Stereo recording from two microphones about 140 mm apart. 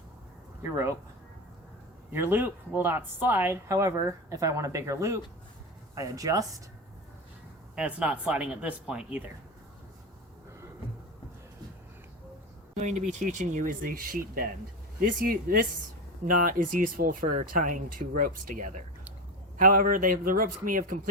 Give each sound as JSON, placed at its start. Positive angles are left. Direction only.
{"t": 2.1, "sound": "speech", "side_deg": -15}
{"t": 7.8, "sound": "speech", "side_deg": -5}
{"t": 12.7, "sound": "speech", "side_deg": -60}
{"t": 16.2, "sound": "speech", "side_deg": -80}
{"t": 19.5, "sound": "a man's voice", "side_deg": -80}